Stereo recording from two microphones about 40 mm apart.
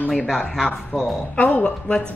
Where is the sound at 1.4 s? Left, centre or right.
Left.